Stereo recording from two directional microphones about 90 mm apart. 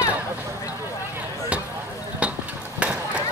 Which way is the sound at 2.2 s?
15° right (ahead or behind).